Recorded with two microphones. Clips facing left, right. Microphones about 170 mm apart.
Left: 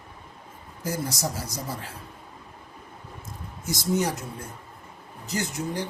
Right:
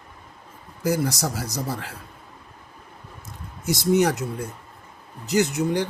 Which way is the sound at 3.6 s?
75° right (ahead or behind).